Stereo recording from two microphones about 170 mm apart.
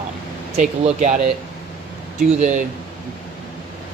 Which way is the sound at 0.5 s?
45° right (ahead or behind).